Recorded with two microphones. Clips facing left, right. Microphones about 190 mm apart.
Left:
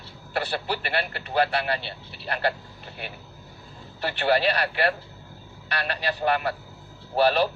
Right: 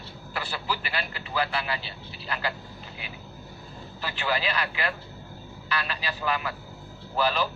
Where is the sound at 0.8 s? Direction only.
60° left (ahead or behind).